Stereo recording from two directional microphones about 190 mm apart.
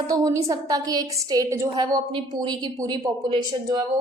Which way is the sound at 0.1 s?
20° right (ahead or behind).